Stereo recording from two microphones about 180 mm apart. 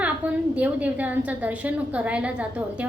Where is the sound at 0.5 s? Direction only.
10° right (ahead or behind).